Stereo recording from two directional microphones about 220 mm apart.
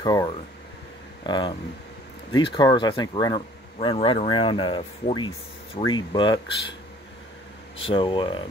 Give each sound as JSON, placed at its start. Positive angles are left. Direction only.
{"t": 0.0, "sound": "speech", "side_deg": 20}
{"t": 7.8, "sound": "speech", "side_deg": 25}